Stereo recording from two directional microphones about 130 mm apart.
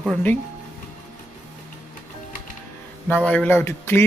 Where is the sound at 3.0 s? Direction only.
10° left (ahead or behind).